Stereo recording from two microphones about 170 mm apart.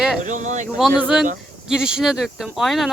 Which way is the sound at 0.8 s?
5° right (ahead or behind).